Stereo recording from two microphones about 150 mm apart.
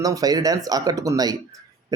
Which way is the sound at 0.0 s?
25° right (ahead or behind).